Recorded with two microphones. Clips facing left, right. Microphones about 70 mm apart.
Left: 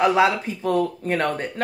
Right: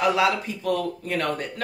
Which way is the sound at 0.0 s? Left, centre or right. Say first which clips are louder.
Left 3 dB; left.